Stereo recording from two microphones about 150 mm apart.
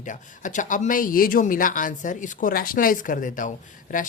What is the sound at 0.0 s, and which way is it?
A woman's voice, 55° left (ahead or behind).